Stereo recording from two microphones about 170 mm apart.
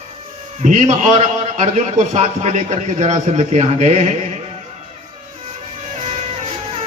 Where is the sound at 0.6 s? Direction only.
45° right (ahead or behind).